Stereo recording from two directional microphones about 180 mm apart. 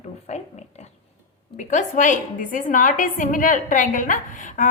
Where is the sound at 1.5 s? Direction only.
45° left (ahead or behind).